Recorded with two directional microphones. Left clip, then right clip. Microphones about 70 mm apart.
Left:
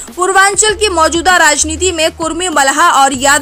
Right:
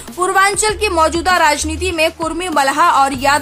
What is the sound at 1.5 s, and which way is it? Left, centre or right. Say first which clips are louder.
A woman's voice: left 3 dB; left.